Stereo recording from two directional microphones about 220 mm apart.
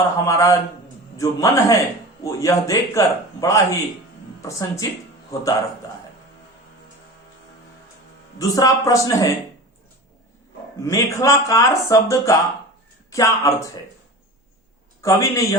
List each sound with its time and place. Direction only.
0.3 s speech: 15° left (ahead or behind)
8.4 s speech: 15° left (ahead or behind)
10.8 s speech: 15° left (ahead or behind)
15.0 s speech: 15° left (ahead or behind)